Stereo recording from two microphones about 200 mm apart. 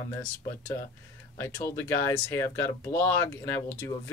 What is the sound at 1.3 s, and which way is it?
Speech, 15° left (ahead or behind).